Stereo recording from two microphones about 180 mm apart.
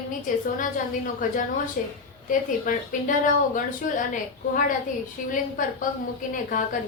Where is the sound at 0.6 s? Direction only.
50° left (ahead or behind).